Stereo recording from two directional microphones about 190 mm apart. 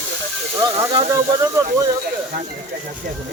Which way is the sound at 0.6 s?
20° right (ahead or behind).